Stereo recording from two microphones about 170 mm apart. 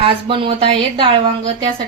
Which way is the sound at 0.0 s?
30° right (ahead or behind).